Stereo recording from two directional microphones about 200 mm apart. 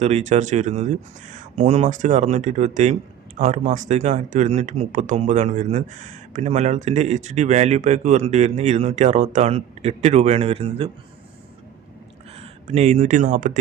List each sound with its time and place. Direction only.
0.0 s speech: 35° right (ahead or behind)
12.4 s speech: 35° right (ahead or behind)